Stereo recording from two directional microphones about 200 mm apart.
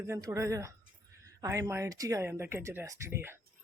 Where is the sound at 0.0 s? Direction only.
15° right (ahead or behind).